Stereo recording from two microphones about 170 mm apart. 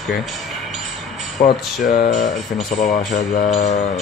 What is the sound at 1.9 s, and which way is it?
Speech, 50° left (ahead or behind).